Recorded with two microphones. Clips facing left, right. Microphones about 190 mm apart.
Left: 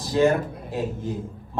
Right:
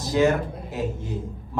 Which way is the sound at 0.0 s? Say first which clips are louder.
Left 1 dB; 30° left (ahead or behind).